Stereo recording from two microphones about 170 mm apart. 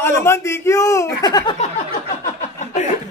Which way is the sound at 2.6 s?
45° left (ahead or behind).